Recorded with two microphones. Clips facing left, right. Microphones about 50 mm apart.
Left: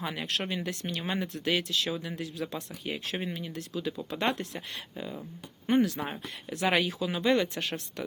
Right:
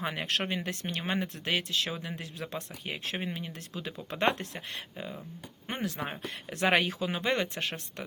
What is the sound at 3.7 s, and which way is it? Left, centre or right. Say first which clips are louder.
Speech: left 6 dB; right.